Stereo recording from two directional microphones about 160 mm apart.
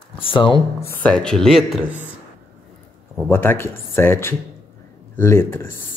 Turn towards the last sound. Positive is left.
turn(degrees=15)  # may be behind; listen again after turning